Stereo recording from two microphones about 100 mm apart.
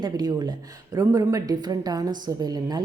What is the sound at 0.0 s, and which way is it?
A woman's voice, 45° right (ahead or behind).